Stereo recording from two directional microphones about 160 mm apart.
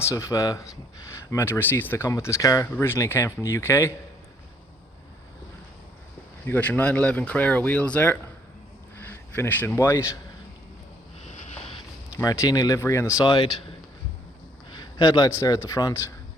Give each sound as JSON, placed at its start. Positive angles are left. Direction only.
{"t": 0.0, "sound": "speech", "side_deg": 20}
{"t": 6.4, "sound": "speech", "side_deg": 10}
{"t": 11.3, "sound": "a sound", "side_deg": 40}
{"t": 12.1, "sound": "speech", "side_deg": 20}
{"t": 13.2, "sound": "speech", "side_deg": 35}
{"t": 14.7, "sound": "a sound", "side_deg": 25}
{"t": 15.4, "sound": "speech", "side_deg": 25}